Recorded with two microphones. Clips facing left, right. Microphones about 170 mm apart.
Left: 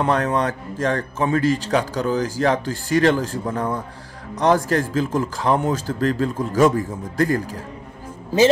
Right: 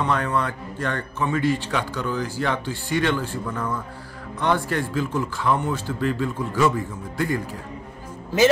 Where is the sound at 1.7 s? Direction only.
40° left (ahead or behind).